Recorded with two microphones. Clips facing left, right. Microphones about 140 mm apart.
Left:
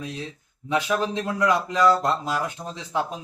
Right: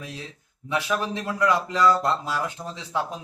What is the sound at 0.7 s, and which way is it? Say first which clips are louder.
A man's voice: left 2 dB; 20° left (ahead or behind).